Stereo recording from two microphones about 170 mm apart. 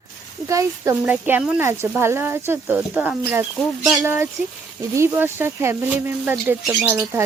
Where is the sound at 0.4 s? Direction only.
15° right (ahead or behind).